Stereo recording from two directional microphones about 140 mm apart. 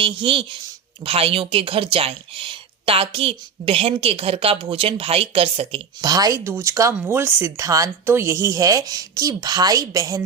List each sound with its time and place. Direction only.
0.0 s speech: 35° right (ahead or behind)
6.0 s speech: 25° right (ahead or behind)